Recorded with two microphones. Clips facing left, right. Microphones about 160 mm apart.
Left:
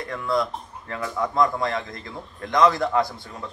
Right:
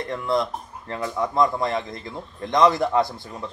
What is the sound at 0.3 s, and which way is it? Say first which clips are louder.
Speech: even; 20° right (ahead or behind).